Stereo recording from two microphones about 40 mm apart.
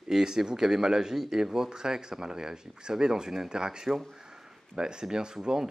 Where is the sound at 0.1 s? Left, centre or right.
Centre.